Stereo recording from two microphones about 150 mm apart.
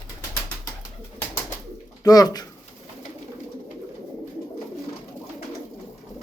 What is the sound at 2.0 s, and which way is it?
Speech, 25° left (ahead or behind).